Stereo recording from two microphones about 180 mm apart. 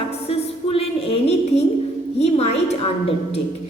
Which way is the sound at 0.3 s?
30° left (ahead or behind).